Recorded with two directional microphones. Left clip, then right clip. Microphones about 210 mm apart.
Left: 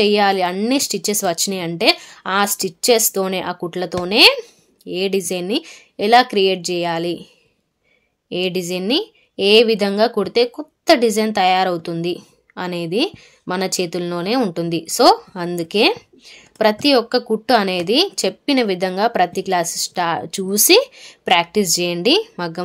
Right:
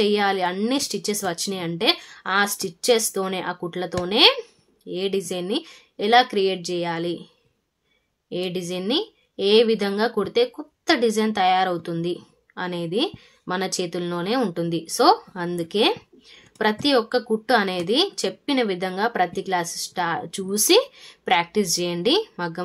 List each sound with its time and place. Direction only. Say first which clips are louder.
0.0 s a woman's voice: left 6 dB; 30° left (ahead or behind)
8.3 s a woman's voice: left 6 dB; 35° left (ahead or behind)